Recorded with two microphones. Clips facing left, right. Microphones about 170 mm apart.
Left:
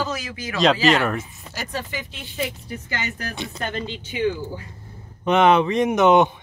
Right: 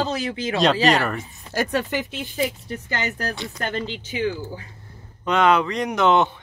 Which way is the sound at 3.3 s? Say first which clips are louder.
Right 1 dB; 20° left (ahead or behind).